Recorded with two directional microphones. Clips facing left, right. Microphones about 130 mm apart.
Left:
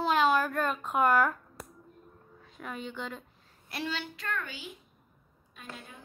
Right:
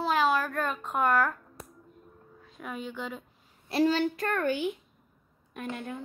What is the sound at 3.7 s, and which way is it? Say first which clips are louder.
A woman's voice: right 12 dB; 40° right (ahead or behind).